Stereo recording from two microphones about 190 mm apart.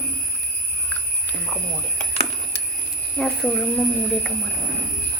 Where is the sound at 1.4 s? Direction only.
5° left (ahead or behind).